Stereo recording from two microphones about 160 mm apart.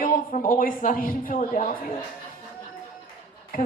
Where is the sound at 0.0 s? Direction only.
60° left (ahead or behind).